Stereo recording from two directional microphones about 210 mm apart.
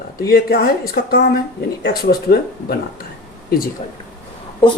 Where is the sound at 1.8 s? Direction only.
45° left (ahead or behind).